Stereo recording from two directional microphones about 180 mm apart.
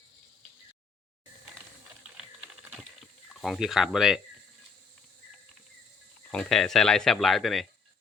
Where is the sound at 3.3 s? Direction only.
Centre (ahead or behind).